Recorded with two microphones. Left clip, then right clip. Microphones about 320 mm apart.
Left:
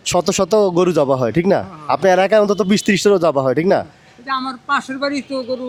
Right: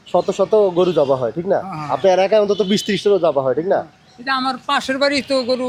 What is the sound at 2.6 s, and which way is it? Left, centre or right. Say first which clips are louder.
Speech: left 2 dB; left.